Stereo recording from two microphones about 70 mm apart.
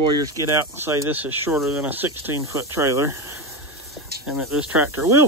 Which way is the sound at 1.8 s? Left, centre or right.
Right.